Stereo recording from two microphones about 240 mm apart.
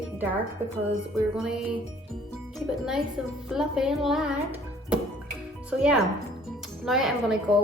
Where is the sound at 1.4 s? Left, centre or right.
Centre.